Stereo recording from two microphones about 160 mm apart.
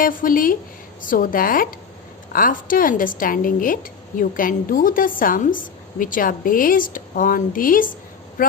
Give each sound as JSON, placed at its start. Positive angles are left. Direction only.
{"t": 0.0, "sound": "speech", "side_deg": 60}